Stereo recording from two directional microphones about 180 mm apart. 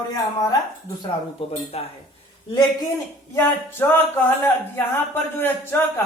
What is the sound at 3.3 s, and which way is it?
Speech, 10° left (ahead or behind).